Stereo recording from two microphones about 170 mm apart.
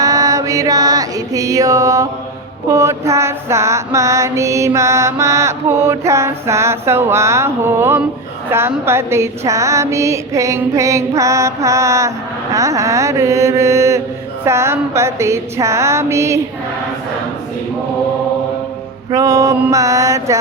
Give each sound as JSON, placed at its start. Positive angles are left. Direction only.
{"t": 0.0, "sound": "mantra", "side_deg": -20}
{"t": 19.1, "sound": "mantra", "side_deg": -20}